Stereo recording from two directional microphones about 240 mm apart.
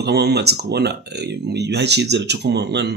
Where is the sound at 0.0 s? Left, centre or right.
Right.